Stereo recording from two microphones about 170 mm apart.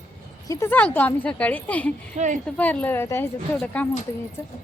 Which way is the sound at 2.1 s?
45° right (ahead or behind).